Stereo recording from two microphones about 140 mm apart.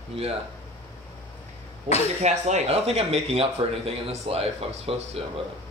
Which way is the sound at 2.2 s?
55° right (ahead or behind).